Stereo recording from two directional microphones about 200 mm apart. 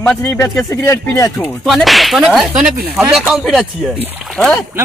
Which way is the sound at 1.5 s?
Centre (ahead or behind).